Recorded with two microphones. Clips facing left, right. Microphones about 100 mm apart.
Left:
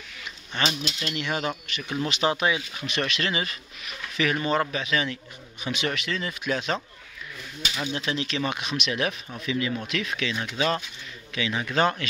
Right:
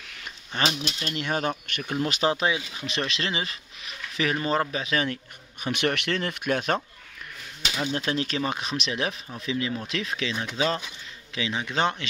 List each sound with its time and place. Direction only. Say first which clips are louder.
0.9 s a man's voice: right 1 dB; 35° right (ahead or behind)
2.4 s a man's voice: left 1 dB; 30° right (ahead or behind); by 6.8 s 55° right (ahead or behind)
7.8 s speech: right 2 dB; 40° right (ahead or behind); by 12.1 s 20° right (ahead or behind)